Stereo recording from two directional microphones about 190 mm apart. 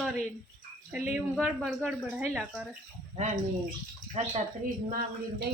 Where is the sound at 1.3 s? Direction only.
5° right (ahead or behind).